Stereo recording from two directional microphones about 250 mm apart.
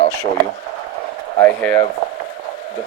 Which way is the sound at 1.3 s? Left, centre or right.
Centre.